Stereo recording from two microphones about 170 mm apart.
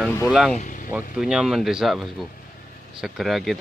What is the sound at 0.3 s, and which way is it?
Speech, centre (ahead or behind).